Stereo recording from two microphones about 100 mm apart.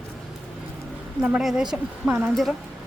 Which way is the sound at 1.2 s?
5° right (ahead or behind).